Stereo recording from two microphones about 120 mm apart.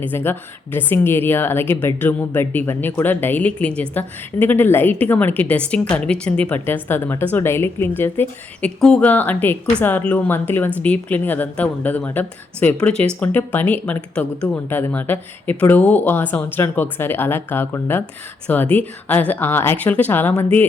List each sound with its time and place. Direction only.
0.0 s a woman's voice: 15° left (ahead or behind)